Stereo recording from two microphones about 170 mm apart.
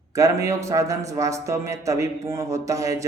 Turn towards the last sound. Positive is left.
turn(degrees=-20)  # may be behind; listen again after turning